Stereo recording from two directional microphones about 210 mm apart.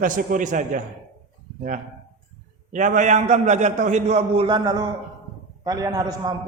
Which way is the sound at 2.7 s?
40° right (ahead or behind).